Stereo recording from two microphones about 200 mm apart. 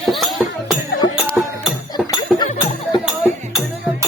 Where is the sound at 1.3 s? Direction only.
Centre (ahead or behind).